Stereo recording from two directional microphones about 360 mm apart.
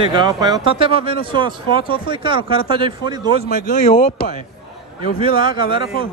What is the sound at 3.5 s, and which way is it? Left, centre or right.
Speech, centre.